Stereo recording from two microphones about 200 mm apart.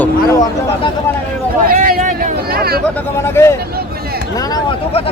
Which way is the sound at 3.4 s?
10° left (ahead or behind).